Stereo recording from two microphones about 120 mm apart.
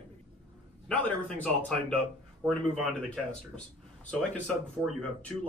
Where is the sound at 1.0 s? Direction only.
15° left (ahead or behind).